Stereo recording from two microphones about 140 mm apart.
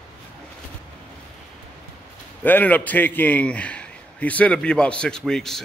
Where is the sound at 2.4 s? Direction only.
10° left (ahead or behind).